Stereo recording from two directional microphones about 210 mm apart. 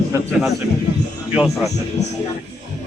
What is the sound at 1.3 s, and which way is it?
Speech, centre (ahead or behind).